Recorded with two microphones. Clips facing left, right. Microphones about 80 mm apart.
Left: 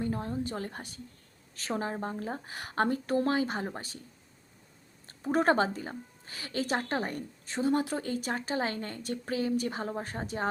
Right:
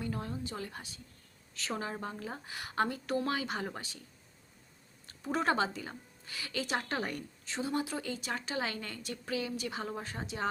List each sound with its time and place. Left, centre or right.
0.0 s speech: left
0.4 s a woman's voice: left
5.0 s a woman's voice: left